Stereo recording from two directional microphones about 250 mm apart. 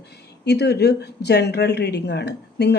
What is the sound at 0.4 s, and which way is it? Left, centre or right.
Speech, left.